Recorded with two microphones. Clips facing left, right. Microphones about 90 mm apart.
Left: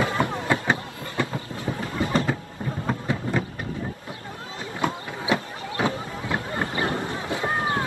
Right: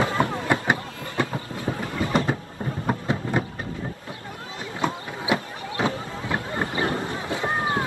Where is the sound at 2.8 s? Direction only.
20° right (ahead or behind).